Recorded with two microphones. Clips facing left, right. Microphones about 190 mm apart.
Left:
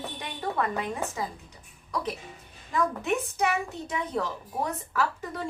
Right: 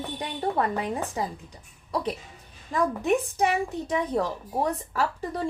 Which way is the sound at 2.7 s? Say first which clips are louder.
Right 3 dB; 35° right (ahead or behind).